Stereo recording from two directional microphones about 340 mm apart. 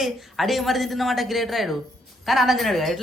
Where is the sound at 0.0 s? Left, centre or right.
Centre.